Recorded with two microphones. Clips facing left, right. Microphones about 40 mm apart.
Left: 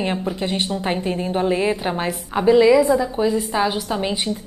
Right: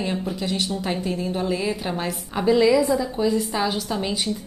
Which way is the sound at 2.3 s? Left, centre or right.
Centre.